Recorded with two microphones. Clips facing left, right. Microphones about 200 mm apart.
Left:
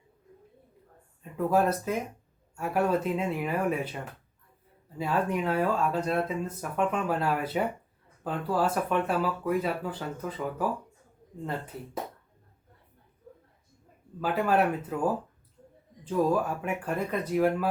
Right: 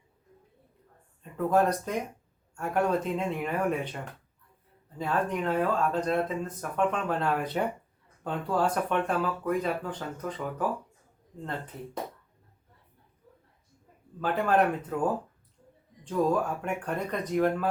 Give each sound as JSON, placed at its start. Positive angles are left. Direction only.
{"t": 1.2, "sound": "speech", "side_deg": 5}
{"t": 14.2, "sound": "speech", "side_deg": 5}